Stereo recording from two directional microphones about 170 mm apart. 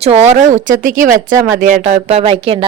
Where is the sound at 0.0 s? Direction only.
40° right (ahead or behind).